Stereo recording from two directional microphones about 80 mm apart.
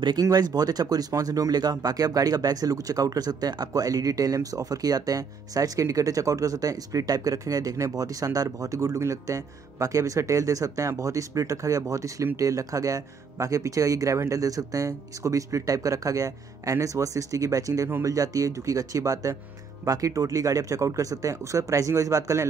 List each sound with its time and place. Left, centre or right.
0.2 s speech: right